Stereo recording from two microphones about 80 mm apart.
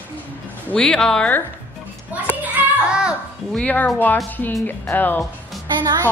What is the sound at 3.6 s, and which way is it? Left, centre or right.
Speech, left.